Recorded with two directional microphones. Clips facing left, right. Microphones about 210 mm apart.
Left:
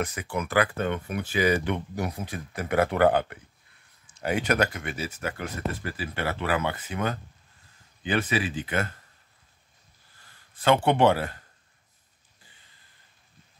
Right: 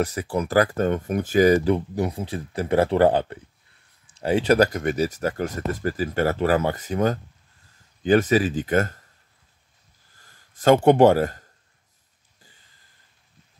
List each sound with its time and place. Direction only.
0.0 s speech: 35° right (ahead or behind)
10.2 s speech: 45° right (ahead or behind)